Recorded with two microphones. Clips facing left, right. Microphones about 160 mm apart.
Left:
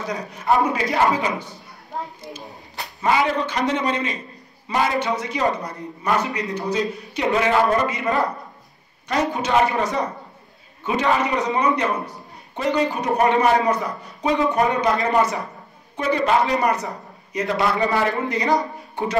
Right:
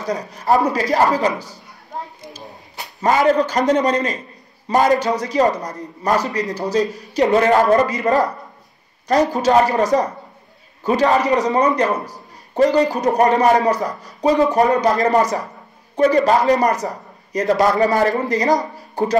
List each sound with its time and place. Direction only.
0.1 s a man's voice: 40° right (ahead or behind)
3.0 s a man's voice: 45° right (ahead or behind)